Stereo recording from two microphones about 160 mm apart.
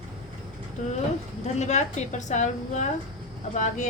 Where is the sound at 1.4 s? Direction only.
45° left (ahead or behind).